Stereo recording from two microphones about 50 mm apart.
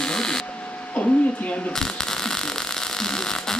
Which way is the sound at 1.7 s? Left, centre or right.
Centre.